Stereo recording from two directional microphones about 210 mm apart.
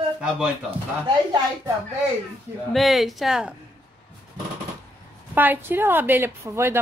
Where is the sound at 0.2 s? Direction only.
5° right (ahead or behind).